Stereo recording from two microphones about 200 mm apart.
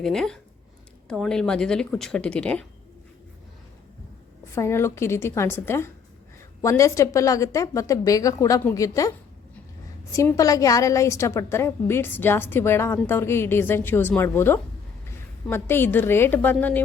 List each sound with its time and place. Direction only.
0.0 s speech: centre (ahead or behind)
4.5 s a woman's voice: 15° left (ahead or behind)